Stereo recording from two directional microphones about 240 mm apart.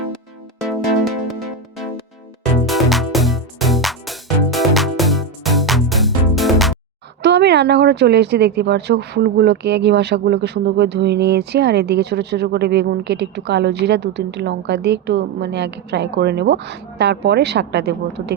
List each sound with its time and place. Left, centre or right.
0.6 s music: centre
2.6 s music: centre
7.2 s speech: right